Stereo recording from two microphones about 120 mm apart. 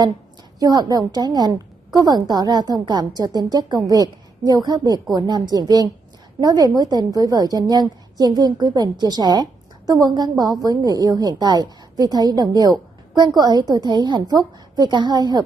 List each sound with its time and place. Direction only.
0.6 s a woman's voice: 30° right (ahead or behind)